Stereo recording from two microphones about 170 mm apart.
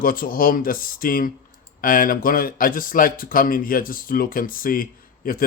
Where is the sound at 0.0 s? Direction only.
55° left (ahead or behind).